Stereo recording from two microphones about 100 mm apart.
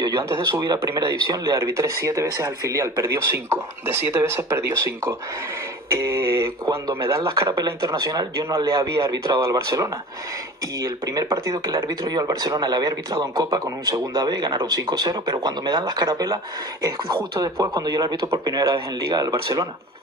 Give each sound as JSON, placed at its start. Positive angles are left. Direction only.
{"t": 0.0, "sound": "speech", "side_deg": -40}
{"t": 1.4, "sound": "speech", "side_deg": -30}
{"t": 17.6, "sound": "speech", "side_deg": -40}